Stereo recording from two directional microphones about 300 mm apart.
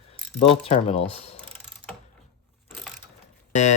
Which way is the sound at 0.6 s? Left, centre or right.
Centre.